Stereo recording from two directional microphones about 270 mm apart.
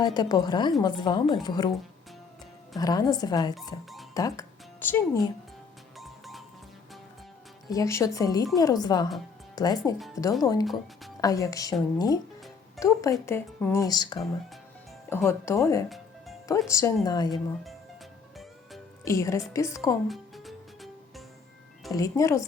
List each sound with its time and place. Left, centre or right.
0.0 s speech: centre
2.7 s speech: centre
6.0 s music: centre
7.7 s speech: centre
12.8 s a sound: centre
13.1 s speech: centre
15.9 s music: centre
16.5 s speech: centre
19.0 s speech: centre
20.1 s music: centre
21.9 s speech: centre